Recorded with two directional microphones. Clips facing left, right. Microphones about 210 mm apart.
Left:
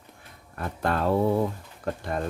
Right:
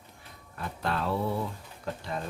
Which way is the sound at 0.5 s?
50° left (ahead or behind).